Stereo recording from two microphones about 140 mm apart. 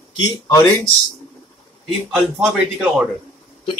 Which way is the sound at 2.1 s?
5° right (ahead or behind).